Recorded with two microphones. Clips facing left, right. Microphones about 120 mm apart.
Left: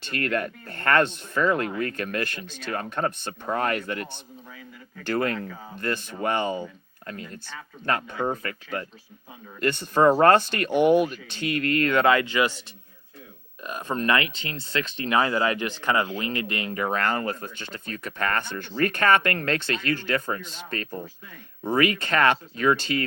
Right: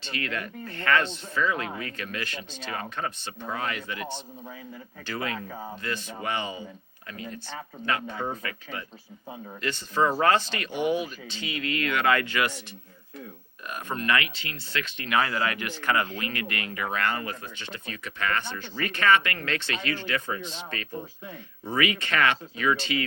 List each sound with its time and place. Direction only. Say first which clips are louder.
0.0 s speech: left 6 dB; 50° left (ahead or behind)
5.0 s speech: left 7 dB; 50° left (ahead or behind)
7.9 s speech: left 4 dB; 45° left (ahead or behind)
12.0 s speech: left 4 dB; 25° left (ahead or behind)
13.7 s speech: left 3 dB; 25° left (ahead or behind)
16.7 s speech: left 3 dB; 40° left (ahead or behind)